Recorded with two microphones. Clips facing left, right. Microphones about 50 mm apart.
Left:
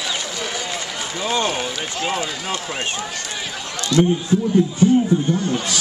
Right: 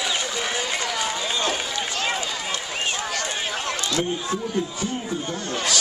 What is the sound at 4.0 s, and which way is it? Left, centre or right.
Speech, centre.